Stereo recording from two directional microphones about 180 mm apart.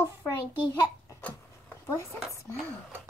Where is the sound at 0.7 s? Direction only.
10° left (ahead or behind).